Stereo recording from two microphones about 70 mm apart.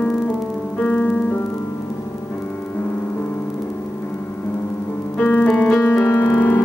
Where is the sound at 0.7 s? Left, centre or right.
Centre.